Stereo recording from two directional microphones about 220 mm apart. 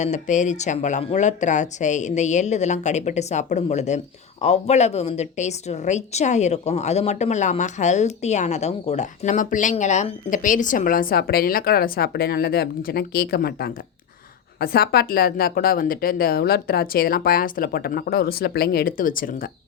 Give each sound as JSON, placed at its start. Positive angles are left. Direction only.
{"t": 0.0, "sound": "speech", "side_deg": 35}